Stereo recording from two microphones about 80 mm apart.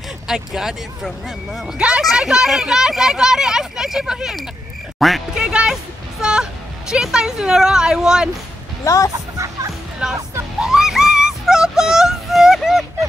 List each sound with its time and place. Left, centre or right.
0.3 s speech: centre
4.9 s quack: centre
5.3 s music: centre
6.2 s a sound: centre
6.9 s speech: centre
8.8 s speech: left
9.1 s music: right
10.0 s speech: centre
10.6 s a sound: centre